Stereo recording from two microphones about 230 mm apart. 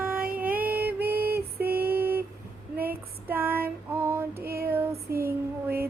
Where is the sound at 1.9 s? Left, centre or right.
Centre.